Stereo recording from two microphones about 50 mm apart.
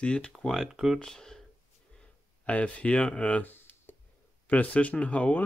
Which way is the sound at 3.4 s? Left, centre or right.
Left.